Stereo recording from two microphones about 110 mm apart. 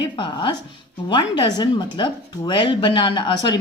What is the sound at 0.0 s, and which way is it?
A woman's voice, 45° left (ahead or behind).